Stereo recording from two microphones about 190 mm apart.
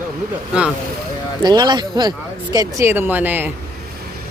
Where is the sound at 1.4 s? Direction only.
20° right (ahead or behind).